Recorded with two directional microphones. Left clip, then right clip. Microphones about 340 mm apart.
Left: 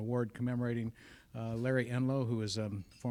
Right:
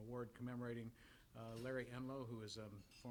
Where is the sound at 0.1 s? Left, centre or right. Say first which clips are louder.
Left 14 dB; left.